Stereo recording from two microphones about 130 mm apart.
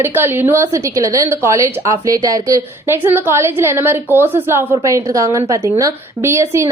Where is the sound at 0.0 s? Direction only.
15° right (ahead or behind).